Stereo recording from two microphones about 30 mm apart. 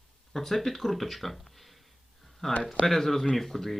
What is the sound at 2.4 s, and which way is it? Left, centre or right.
Speech, centre.